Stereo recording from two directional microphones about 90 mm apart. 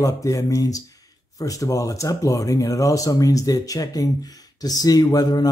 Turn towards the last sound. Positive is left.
turn(degrees=45)  # may be behind; listen again after turning